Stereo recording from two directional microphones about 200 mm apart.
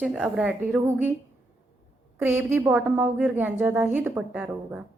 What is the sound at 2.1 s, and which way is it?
A woman's voice, 10° right (ahead or behind).